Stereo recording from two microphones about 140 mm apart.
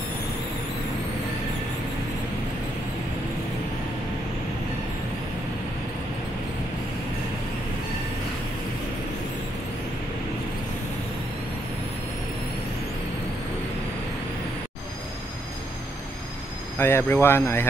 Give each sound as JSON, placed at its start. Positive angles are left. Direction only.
{"t": 16.7, "sound": "speech", "side_deg": 15}